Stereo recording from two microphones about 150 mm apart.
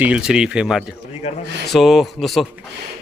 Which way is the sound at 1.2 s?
45° left (ahead or behind).